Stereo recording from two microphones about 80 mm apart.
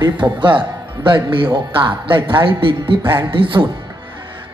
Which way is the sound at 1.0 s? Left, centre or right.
Right.